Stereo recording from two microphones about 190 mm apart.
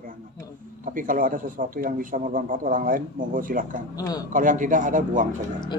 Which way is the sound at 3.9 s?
20° left (ahead or behind).